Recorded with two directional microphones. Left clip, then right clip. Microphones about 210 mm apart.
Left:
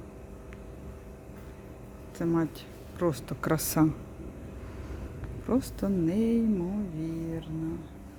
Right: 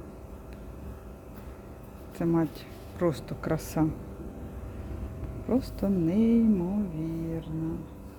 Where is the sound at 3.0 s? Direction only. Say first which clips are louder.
Right 1 dB; 10° left (ahead or behind).